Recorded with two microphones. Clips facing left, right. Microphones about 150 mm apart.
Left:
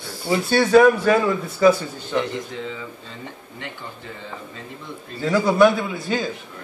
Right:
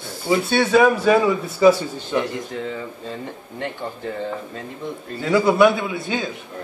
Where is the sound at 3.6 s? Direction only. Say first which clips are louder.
Right 9 dB; 50° right (ahead or behind).